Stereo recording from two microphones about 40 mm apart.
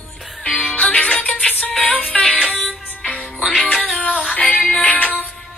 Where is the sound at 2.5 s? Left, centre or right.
Left.